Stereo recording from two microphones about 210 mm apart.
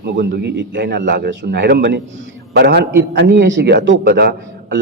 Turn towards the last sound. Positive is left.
turn(degrees=-55)  # may be behind; listen again after turning